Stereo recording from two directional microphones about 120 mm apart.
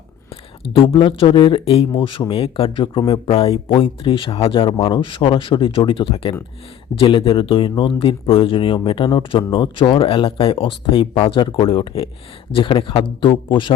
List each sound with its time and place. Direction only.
0.6 s speech: 50° left (ahead or behind)